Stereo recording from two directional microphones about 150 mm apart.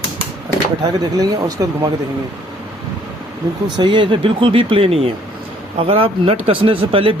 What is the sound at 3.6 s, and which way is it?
Speech, 30° right (ahead or behind).